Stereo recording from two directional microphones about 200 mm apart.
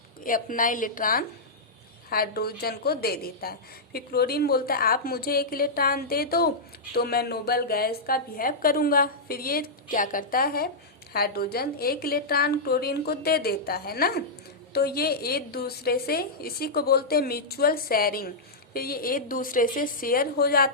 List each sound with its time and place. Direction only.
0.2 s a woman's voice: 45° left (ahead or behind)